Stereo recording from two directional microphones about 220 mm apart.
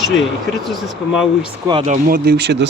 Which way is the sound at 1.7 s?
30° right (ahead or behind).